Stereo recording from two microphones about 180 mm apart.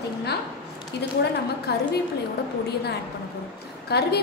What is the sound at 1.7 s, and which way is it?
Speech, 65° left (ahead or behind).